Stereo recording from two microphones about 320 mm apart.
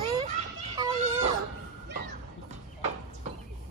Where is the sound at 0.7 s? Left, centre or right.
Centre.